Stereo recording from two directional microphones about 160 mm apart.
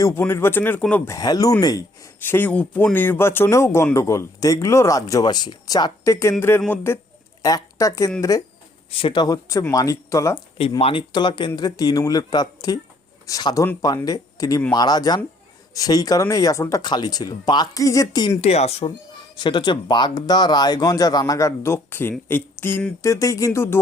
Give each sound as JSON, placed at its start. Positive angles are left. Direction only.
{"t": 0.0, "sound": "a woman's voice", "side_deg": 15}
{"t": 8.9, "sound": "speech", "side_deg": 35}
{"t": 10.8, "sound": "speech", "side_deg": 35}
{"t": 18.3, "sound": "speech", "side_deg": 40}
{"t": 19.4, "sound": "speech", "side_deg": 30}